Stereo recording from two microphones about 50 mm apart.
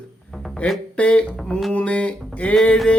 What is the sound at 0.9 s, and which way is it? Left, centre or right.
Mantra, left.